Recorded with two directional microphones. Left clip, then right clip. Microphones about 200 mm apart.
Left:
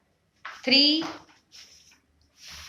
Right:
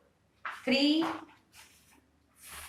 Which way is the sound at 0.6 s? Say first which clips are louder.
Left 8 dB; 55° left (ahead or behind).